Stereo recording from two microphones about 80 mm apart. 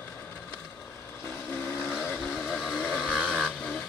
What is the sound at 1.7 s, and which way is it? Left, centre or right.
Vehicle, left.